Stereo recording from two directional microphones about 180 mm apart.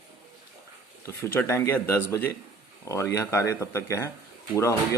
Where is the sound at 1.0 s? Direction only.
15° left (ahead or behind).